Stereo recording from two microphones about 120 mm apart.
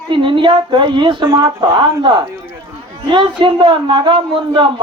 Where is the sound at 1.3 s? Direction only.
30° right (ahead or behind).